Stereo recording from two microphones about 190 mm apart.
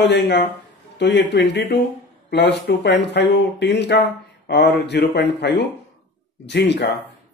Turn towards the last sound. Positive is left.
turn(degrees=65)  # may be behind; listen again after turning